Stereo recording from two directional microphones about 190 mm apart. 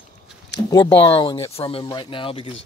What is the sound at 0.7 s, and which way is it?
Speech, 15° left (ahead or behind).